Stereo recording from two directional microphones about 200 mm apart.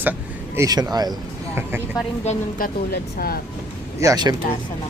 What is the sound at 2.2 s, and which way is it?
Speech, 45° left (ahead or behind).